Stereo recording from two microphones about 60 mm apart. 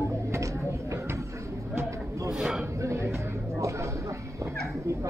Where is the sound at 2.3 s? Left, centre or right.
Centre.